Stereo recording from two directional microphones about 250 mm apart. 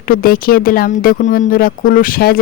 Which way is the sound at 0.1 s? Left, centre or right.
Left.